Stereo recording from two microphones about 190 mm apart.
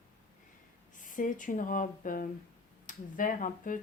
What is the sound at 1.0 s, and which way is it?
A woman's voice, 45° left (ahead or behind).